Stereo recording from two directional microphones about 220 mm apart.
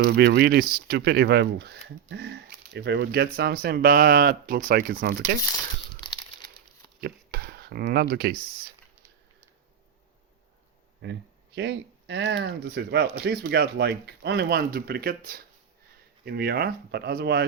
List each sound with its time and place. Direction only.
0.0 s speech: 45° right (ahead or behind)
6.0 s crumpling: 10° left (ahead or behind)
7.0 s a sound: 45° right (ahead or behind)
11.0 s speech: 50° right (ahead or behind)